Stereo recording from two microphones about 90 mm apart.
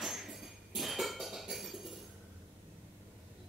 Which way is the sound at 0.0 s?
Centre (ahead or behind).